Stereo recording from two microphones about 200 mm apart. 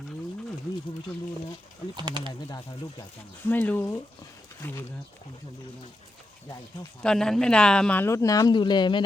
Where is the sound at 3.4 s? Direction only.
10° left (ahead or behind).